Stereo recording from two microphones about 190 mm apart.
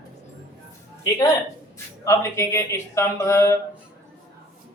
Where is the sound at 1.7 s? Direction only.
15° left (ahead or behind).